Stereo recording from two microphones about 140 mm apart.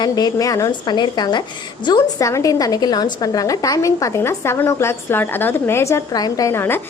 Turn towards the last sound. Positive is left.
turn(degrees=15)  # may be behind; listen again after turning